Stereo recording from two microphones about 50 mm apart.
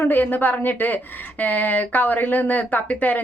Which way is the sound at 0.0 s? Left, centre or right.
Left.